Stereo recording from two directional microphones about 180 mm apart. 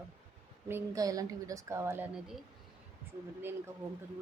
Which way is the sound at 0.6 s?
15° right (ahead or behind).